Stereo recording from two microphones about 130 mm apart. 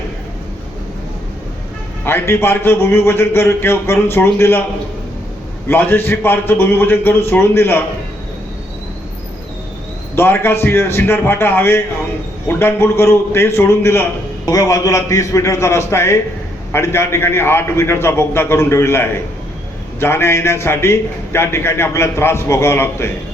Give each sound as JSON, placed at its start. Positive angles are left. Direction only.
{"t": 2.0, "sound": "a man's voice", "side_deg": 15}
{"t": 5.6, "sound": "a man's voice", "side_deg": 15}
{"t": 10.2, "sound": "a man's voice", "side_deg": 15}